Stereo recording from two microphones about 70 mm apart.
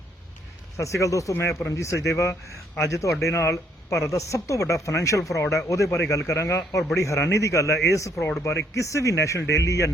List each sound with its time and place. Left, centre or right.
0.8 s a man's voice: left